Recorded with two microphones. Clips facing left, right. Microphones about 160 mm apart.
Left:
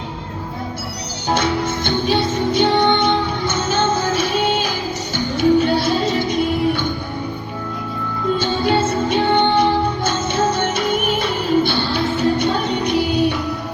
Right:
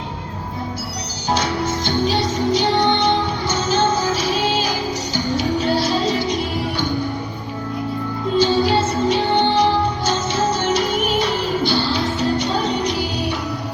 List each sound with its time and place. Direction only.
1.3 s music: 55° left (ahead or behind)
8.4 s music: 55° left (ahead or behind)